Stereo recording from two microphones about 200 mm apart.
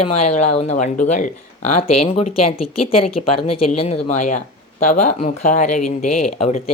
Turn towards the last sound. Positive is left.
turn(degrees=35)  # may be behind; listen again after turning